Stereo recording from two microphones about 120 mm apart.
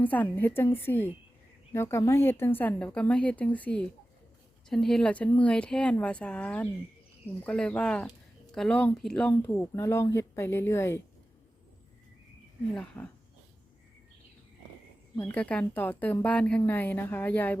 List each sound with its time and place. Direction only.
0.0 s a woman's voice: 15° left (ahead or behind)
9.3 s speech: 15° left (ahead or behind)
12.7 s a woman's voice: 10° left (ahead or behind)
15.2 s a woman's voice: 15° left (ahead or behind)